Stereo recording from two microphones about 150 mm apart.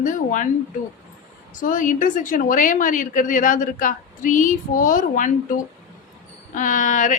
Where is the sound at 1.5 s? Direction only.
60° left (ahead or behind).